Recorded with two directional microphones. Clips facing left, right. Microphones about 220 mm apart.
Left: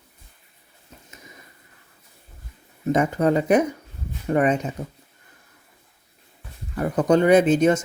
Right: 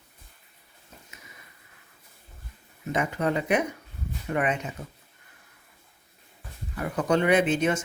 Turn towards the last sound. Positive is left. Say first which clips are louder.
# left 7 dB
turn(degrees=40)  # may be behind; listen again after turning